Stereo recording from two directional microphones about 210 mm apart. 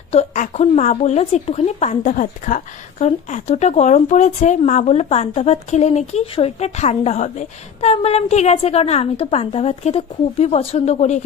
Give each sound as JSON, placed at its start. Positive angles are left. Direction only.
{"t": 0.1, "sound": "speech", "side_deg": 30}